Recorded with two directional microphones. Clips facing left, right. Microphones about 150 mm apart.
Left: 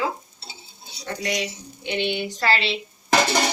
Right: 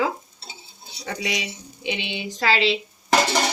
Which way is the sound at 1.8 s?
90° right.